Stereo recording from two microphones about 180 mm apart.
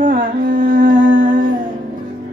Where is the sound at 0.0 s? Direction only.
50° right (ahead or behind).